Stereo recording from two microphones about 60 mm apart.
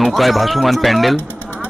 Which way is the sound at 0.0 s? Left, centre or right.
Centre.